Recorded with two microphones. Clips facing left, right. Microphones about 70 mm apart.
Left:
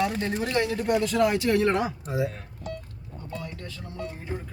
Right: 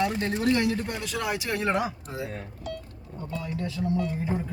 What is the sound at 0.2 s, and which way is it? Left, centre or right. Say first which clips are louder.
A man's voice: right 1 dB; centre.